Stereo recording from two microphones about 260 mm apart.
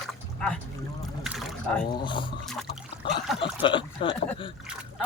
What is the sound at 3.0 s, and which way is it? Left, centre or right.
Speech, centre.